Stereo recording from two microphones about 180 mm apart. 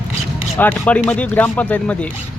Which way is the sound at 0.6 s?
10° left (ahead or behind).